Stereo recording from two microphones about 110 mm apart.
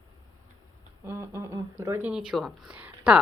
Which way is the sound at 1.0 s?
25° right (ahead or behind).